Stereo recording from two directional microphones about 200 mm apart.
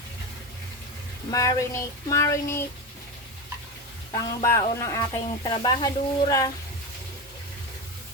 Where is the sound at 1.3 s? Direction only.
15° left (ahead or behind).